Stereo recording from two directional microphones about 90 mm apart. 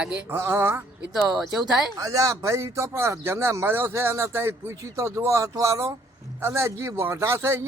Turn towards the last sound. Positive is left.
turn(degrees=-30)  # may be behind; listen again after turning